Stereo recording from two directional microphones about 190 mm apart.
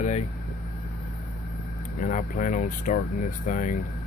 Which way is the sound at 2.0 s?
45° left (ahead or behind).